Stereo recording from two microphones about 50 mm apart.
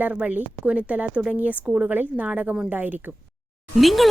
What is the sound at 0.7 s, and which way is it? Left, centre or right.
Speech, right.